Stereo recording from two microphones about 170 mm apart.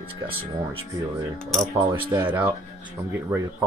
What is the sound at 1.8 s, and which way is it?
Speech, 25° right (ahead or behind).